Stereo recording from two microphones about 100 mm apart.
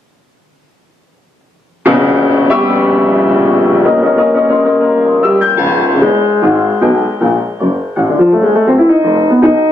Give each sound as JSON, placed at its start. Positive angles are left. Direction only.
{"t": 1.8, "sound": "music", "side_deg": -15}
{"t": 6.1, "sound": "music", "side_deg": -25}
{"t": 8.8, "sound": "music", "side_deg": -30}
{"t": 9.1, "sound": "music", "side_deg": -40}